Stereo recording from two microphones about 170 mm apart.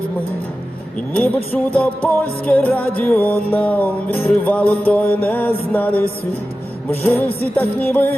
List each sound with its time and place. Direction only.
1.7 s music: 10° left (ahead or behind)